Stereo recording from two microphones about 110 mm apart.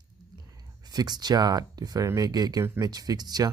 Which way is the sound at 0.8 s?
40° right (ahead or behind).